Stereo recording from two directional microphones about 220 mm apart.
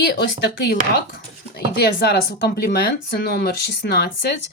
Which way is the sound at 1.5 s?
45° left (ahead or behind).